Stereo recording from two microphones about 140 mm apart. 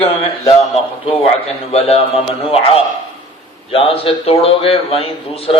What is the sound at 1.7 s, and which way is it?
Speech, 45° left (ahead or behind).